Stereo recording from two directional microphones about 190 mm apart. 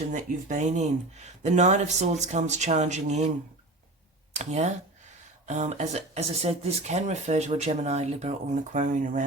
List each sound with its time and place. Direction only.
0.1 s speech: 40° right (ahead or behind)
4.4 s speech: 35° right (ahead or behind)